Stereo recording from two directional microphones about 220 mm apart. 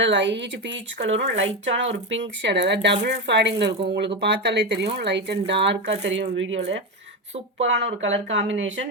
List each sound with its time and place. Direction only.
0.0 s speech: 55° right (ahead or behind)